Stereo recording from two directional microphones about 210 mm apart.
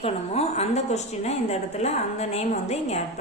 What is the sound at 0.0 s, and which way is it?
A woman's voice, 30° left (ahead or behind).